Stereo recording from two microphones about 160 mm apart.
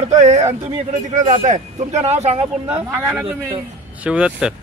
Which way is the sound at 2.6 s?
10° right (ahead or behind).